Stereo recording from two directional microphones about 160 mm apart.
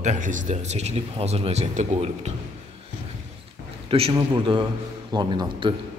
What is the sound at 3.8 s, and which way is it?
A man's voice, 35° right (ahead or behind).